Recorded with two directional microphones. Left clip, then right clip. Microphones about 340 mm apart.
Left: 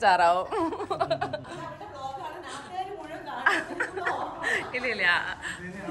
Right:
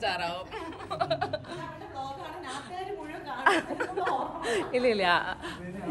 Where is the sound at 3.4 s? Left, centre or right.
Centre.